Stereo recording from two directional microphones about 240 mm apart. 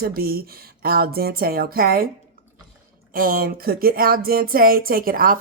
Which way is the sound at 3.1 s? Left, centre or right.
Right.